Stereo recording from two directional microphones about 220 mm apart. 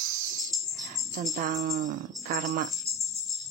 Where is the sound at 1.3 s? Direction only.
35° right (ahead or behind).